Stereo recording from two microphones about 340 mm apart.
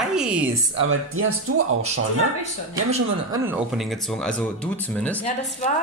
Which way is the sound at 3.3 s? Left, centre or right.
Centre.